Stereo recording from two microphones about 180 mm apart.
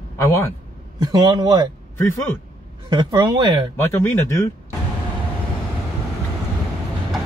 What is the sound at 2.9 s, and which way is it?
Speech, 20° right (ahead or behind).